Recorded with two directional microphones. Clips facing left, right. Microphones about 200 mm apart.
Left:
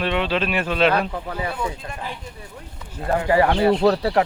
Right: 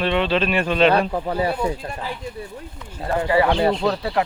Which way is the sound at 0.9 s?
35° right (ahead or behind).